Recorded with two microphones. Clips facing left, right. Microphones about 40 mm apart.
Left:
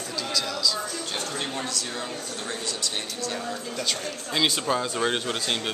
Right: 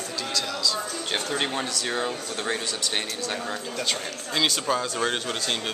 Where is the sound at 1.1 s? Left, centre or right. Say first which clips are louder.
Right 4 dB; right.